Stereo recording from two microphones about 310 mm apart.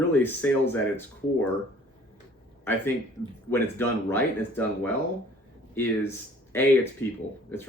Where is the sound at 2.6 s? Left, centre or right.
Centre.